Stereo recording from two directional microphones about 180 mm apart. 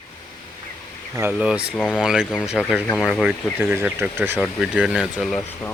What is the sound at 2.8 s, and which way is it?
Speech, 5° left (ahead or behind).